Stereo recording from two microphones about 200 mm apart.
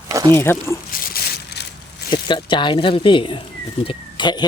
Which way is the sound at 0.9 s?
50° left (ahead or behind).